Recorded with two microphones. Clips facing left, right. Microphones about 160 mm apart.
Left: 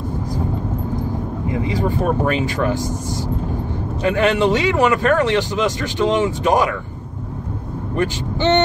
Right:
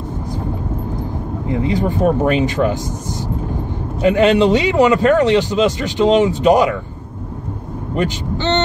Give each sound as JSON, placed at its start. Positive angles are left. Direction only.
{"t": 1.5, "sound": "speech", "side_deg": -20}
{"t": 4.0, "sound": "a man's voice", "side_deg": -20}